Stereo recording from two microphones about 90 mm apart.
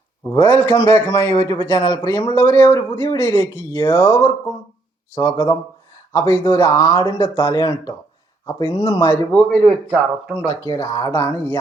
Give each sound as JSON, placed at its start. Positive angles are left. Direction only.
{"t": 0.3, "sound": "a man's voice", "side_deg": 30}
{"t": 2.3, "sound": "a man's voice", "side_deg": 30}
{"t": 6.7, "sound": "speech", "side_deg": 45}
{"t": 7.2, "sound": "a man's voice", "side_deg": 30}
{"t": 7.6, "sound": "speech", "side_deg": 50}
{"t": 8.4, "sound": "a man's voice", "side_deg": 35}
{"t": 9.0, "sound": "a man's voice", "side_deg": 30}